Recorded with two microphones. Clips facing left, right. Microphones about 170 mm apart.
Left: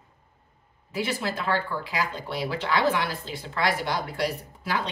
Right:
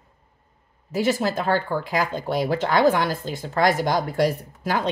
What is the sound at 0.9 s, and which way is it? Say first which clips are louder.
Speech: right 7 dB; 45° right (ahead or behind).